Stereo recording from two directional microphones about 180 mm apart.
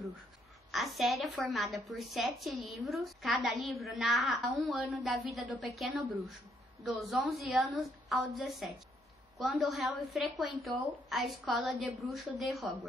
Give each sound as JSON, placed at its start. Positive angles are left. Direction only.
{"t": 0.7, "sound": "a woman's voice", "side_deg": 0}